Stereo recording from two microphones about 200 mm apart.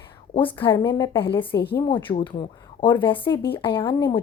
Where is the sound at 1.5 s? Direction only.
55° left (ahead or behind).